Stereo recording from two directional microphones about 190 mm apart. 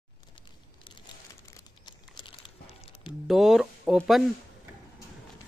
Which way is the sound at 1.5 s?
25° left (ahead or behind).